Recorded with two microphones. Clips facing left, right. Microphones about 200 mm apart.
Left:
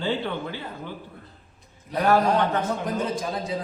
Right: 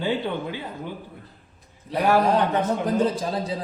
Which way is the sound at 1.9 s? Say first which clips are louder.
Right 1 dB; 10° right (ahead or behind).